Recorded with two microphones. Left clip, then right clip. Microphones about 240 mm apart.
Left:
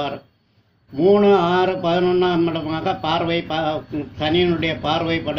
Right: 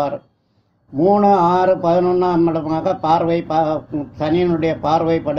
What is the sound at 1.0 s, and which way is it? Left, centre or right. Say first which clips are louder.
Mantra: right 2 dB; right.